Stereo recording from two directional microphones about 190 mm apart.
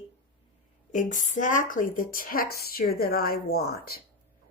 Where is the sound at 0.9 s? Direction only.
40° left (ahead or behind).